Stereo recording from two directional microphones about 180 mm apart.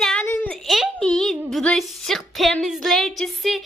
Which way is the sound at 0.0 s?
5° left (ahead or behind).